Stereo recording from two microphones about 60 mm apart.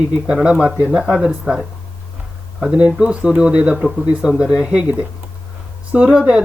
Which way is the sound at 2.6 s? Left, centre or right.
Centre.